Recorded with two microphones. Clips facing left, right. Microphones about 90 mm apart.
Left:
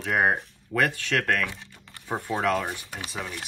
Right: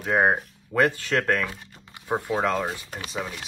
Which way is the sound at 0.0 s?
20° right (ahead or behind).